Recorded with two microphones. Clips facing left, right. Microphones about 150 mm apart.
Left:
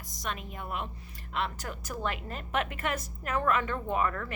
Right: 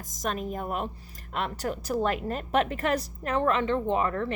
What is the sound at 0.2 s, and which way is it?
A woman's voice, 40° right (ahead or behind).